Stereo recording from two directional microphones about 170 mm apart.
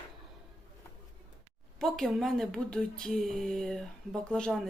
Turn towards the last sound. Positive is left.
turn(degrees=5)  # may be behind; listen again after turning